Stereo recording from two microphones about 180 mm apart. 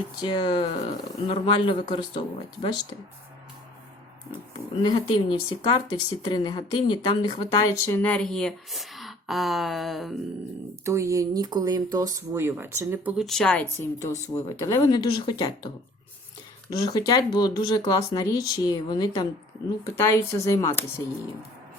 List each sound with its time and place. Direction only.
0.2 s speech: 25° left (ahead or behind)
4.8 s speech: 25° left (ahead or behind)
7.9 s speech: 10° left (ahead or behind)
10.8 s speech: 15° right (ahead or behind)
13.1 s speech: centre (ahead or behind)
14.0 s speech: 15° left (ahead or behind)
16.7 s speech: 20° left (ahead or behind)